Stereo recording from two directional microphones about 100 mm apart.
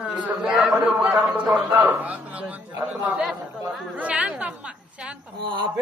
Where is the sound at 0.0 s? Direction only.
Centre (ahead or behind).